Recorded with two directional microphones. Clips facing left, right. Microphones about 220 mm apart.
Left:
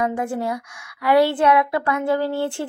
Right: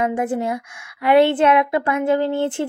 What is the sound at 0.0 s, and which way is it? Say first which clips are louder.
Speech: right 2 dB; 20° right (ahead or behind).